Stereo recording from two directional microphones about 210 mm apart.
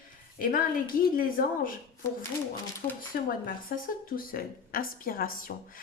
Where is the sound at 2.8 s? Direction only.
35° left (ahead or behind).